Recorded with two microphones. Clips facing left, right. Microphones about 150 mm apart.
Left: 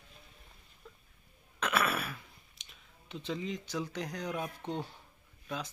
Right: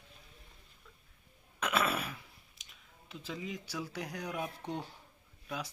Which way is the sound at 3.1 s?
5° right (ahead or behind).